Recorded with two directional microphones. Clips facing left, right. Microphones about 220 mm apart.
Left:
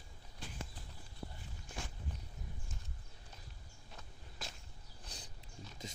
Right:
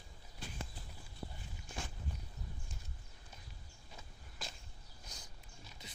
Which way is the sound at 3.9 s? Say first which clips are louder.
Even; centre (ahead or behind).